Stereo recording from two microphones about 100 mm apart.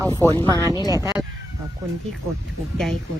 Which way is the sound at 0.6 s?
40° left (ahead or behind).